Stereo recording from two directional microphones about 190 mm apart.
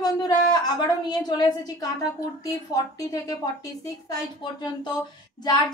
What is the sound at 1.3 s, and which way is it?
A woman's voice, 20° left (ahead or behind).